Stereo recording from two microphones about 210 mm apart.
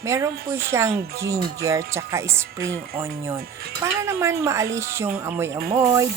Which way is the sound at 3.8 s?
15° right (ahead or behind).